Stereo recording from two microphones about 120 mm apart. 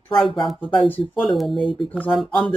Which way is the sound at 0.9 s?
15° left (ahead or behind).